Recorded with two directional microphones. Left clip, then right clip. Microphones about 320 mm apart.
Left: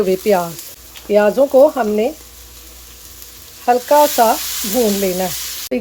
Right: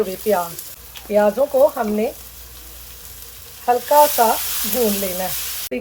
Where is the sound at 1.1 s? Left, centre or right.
Left.